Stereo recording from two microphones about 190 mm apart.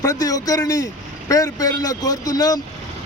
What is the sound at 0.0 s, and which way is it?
Speech, 20° left (ahead or behind).